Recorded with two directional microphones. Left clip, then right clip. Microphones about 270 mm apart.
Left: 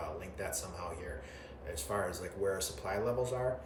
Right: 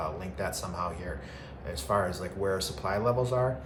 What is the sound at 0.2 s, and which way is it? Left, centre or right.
Speech, centre.